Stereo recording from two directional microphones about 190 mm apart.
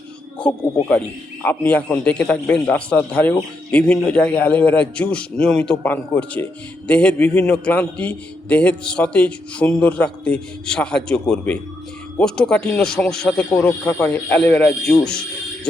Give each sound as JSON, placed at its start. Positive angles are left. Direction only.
{"t": 0.9, "sound": "a man's voice", "side_deg": 10}